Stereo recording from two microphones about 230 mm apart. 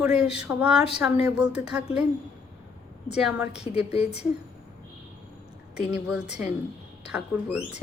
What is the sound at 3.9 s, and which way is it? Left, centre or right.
Speech, left.